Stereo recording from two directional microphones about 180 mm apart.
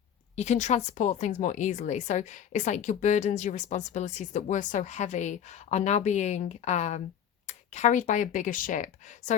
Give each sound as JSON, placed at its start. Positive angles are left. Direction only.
{"t": 0.3, "sound": "speech", "side_deg": 40}